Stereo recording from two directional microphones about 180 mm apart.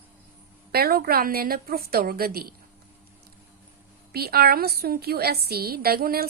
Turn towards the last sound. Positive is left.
turn(degrees=-55)  # may be behind; listen again after turning